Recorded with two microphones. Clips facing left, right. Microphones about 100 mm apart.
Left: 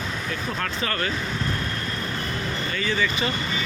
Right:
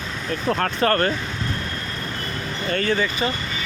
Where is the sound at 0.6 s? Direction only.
50° right (ahead or behind).